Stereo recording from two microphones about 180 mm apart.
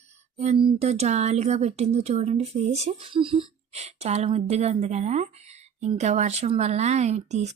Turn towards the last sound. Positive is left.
turn(degrees=-40)  # may be behind; listen again after turning